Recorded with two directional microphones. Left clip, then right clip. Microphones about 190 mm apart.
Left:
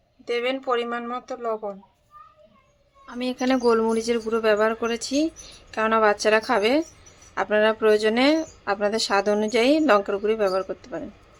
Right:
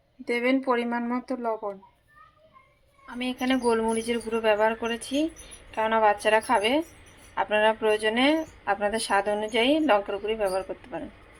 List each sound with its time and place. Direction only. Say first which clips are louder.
0.3 s speech: even; centre (ahead or behind)
3.1 s a woman's voice: left 4 dB; 25° left (ahead or behind)